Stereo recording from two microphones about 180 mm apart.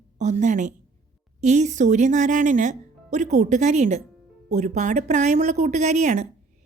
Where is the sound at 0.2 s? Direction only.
40° right (ahead or behind).